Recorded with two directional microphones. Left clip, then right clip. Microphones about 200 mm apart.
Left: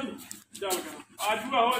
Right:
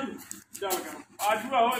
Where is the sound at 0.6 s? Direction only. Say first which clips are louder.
Even; centre (ahead or behind).